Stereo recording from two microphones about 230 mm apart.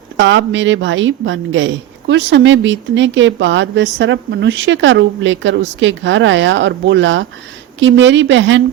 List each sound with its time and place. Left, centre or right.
0.2 s a woman's voice: right